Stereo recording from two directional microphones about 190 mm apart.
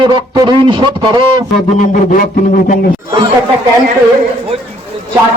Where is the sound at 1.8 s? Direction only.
45° left (ahead or behind).